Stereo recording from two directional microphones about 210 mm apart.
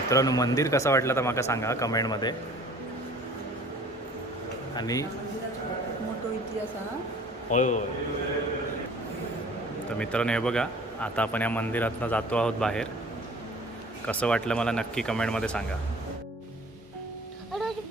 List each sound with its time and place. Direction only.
0.1 s speech: 15° left (ahead or behind)
4.7 s speech: 20° left (ahead or behind)
7.5 s a man's voice: 35° left (ahead or behind)
10.0 s a man's voice: 5° left (ahead or behind)
14.1 s a man's voice: 5° left (ahead or behind)